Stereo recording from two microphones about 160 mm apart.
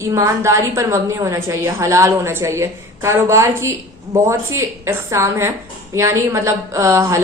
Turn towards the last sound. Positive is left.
turn(degrees=-20)  # may be behind; listen again after turning